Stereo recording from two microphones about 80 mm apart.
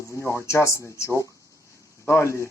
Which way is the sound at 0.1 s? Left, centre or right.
Left.